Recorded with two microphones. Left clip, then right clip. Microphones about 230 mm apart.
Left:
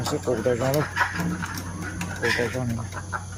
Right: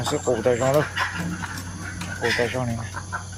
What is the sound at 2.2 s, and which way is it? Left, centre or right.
Speech, centre.